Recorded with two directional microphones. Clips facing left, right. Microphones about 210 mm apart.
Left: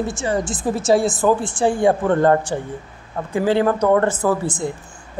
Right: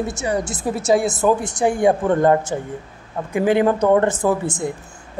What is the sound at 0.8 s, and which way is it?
A woman's voice, 20° right (ahead or behind).